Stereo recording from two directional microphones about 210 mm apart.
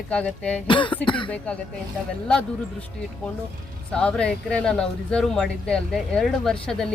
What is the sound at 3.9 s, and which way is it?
Speech, 5° left (ahead or behind).